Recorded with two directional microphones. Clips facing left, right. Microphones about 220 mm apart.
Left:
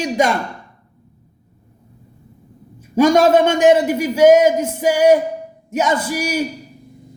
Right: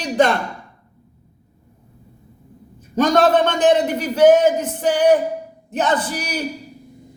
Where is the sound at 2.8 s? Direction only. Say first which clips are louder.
Left 3 dB; 10° left (ahead or behind).